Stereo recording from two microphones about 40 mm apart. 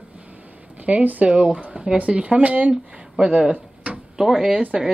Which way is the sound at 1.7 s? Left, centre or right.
Right.